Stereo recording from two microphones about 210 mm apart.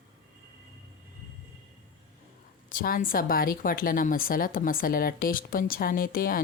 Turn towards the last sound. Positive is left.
turn(degrees=45)  # may be behind; listen again after turning